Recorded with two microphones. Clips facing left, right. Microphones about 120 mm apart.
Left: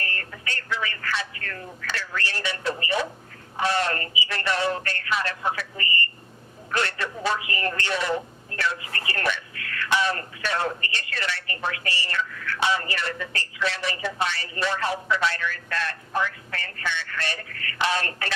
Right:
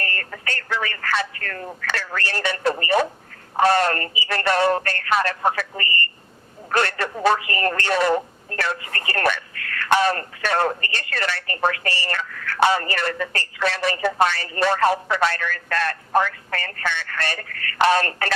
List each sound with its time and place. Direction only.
0.0 s speech: 55° right (ahead or behind)